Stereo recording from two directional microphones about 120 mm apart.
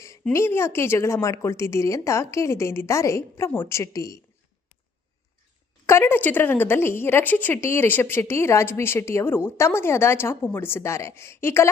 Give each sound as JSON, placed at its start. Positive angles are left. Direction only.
{"t": 0.3, "sound": "speech", "side_deg": 20}
{"t": 5.8, "sound": "speech", "side_deg": 20}